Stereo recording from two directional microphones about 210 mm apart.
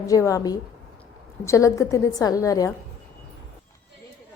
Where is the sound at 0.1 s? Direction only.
15° left (ahead or behind).